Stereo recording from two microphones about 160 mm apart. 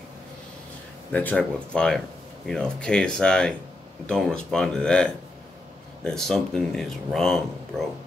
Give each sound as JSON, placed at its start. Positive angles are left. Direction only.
{"t": 1.1, "sound": "speech", "side_deg": 5}